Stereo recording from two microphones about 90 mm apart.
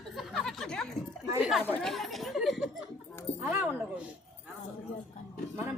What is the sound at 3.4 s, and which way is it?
Speech, 25° right (ahead or behind).